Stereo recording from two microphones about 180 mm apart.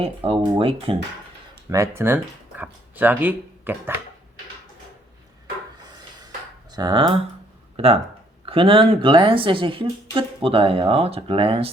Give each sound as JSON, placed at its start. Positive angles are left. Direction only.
{"t": 0.0, "sound": "a woman's voice", "side_deg": -30}
{"t": 1.7, "sound": "speech", "side_deg": -15}
{"t": 6.2, "sound": "a sound", "side_deg": -20}
{"t": 7.8, "sound": "a woman's voice", "side_deg": -35}